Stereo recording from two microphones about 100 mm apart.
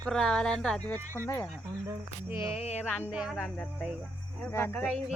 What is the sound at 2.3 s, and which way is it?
Speech, 25° right (ahead or behind).